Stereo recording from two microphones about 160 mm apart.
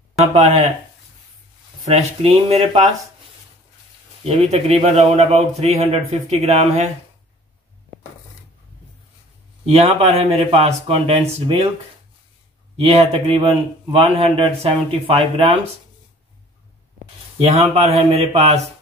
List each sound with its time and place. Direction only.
0.3 s speech: 45° right (ahead or behind)
1.9 s a man's voice: 40° right (ahead or behind)
4.2 s a man's voice: 40° right (ahead or behind)
9.7 s a man's voice: 40° right (ahead or behind)
12.7 s a man's voice: 40° right (ahead or behind)
17.4 s a man's voice: 40° right (ahead or behind)